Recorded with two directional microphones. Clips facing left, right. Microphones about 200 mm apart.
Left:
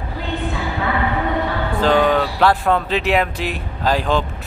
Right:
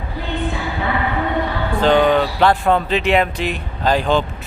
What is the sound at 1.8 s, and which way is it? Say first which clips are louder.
Speech: right 2 dB; centre (ahead or behind).